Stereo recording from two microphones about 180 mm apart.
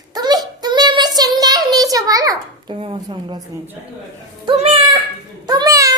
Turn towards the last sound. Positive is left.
turn(degrees=-20)  # may be behind; listen again after turning